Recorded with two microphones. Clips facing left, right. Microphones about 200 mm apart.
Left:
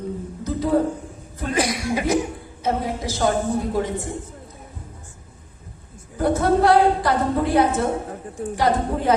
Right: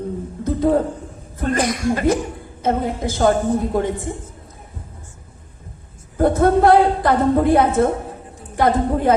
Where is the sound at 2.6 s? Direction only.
55° right (ahead or behind).